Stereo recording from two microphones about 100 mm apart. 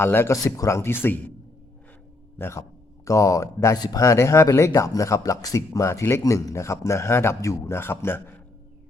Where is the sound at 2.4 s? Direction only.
25° left (ahead or behind).